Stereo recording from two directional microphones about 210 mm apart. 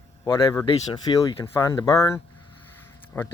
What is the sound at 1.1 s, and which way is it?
Speech, 25° left (ahead or behind).